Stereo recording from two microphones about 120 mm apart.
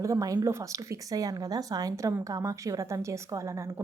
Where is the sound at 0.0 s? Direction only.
25° right (ahead or behind).